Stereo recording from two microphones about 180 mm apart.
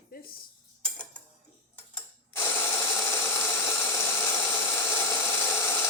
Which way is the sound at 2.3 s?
15° left (ahead or behind).